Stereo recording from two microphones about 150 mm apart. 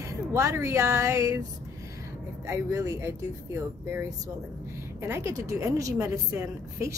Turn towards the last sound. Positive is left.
turn(degrees=-20)  # may be behind; listen again after turning